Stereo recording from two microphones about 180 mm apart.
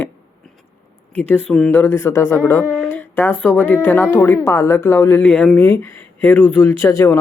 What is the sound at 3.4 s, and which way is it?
Speech, 10° left (ahead or behind).